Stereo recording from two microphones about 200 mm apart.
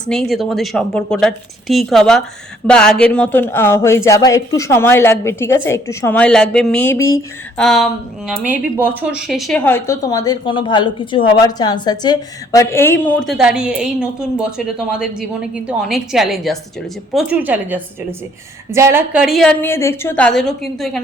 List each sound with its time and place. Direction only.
0.1 s a woman's voice: centre (ahead or behind)
9.0 s a woman's voice: 5° right (ahead or behind)
9.6 s a woman's voice: 10° left (ahead or behind)
13.2 s a woman's voice: centre (ahead or behind)